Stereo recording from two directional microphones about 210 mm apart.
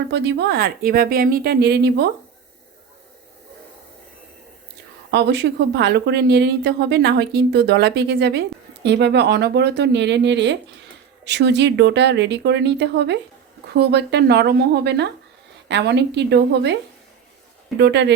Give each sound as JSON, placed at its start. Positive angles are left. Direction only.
{"t": 0.1, "sound": "a woman's voice", "side_deg": -55}
{"t": 5.1, "sound": "a woman's voice", "side_deg": -55}
{"t": 17.7, "sound": "a woman's voice", "side_deg": -55}